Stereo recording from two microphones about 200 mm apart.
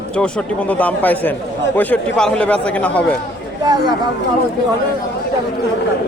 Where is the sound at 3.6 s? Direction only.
20° right (ahead or behind).